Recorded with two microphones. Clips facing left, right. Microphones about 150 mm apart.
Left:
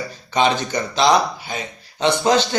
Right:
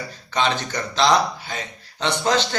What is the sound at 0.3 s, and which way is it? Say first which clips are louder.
Speech: left 4 dB; 15° left (ahead or behind).